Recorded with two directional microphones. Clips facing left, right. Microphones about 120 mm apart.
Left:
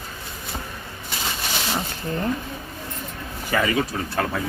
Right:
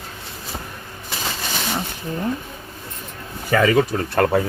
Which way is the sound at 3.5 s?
40° right (ahead or behind).